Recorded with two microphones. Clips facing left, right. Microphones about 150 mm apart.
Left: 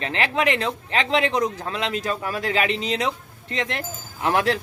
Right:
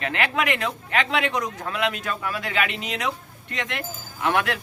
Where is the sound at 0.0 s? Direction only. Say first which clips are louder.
Left 2 dB; 30° left (ahead or behind).